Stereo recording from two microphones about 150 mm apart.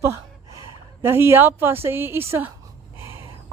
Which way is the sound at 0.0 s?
20° right (ahead or behind).